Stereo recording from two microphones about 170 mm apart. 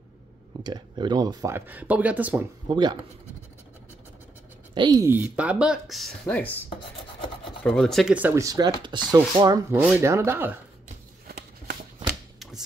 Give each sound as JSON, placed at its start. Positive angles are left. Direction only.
{"t": 0.7, "sound": "speech", "side_deg": -25}
{"t": 2.7, "sound": "speech", "side_deg": -25}
{"t": 4.7, "sound": "speech", "side_deg": -25}
{"t": 7.6, "sound": "speech", "side_deg": 5}
{"t": 8.1, "sound": "speech", "side_deg": -10}
{"t": 9.8, "sound": "speech", "side_deg": -10}
{"t": 11.2, "sound": "a sound", "side_deg": -60}
{"t": 12.4, "sound": "a sound", "side_deg": 0}